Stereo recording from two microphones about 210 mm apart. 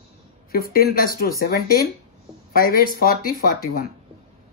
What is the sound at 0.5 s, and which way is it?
Speech, 45° left (ahead or behind).